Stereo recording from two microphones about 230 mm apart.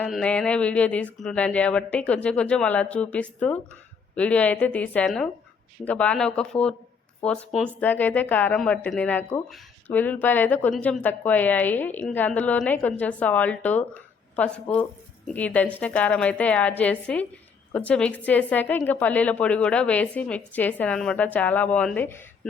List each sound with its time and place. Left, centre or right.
0.0 s a woman's voice: centre